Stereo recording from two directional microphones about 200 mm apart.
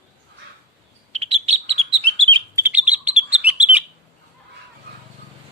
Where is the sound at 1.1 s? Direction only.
30° right (ahead or behind).